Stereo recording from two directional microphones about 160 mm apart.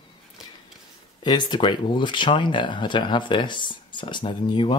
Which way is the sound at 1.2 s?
30° left (ahead or behind).